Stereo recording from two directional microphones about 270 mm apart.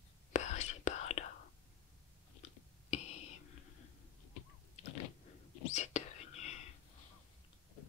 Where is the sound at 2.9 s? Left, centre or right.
Left.